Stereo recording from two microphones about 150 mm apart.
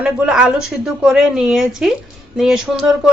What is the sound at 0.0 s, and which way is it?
Speech, 5° right (ahead or behind).